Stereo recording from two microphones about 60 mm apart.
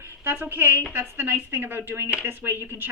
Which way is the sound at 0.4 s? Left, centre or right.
Right.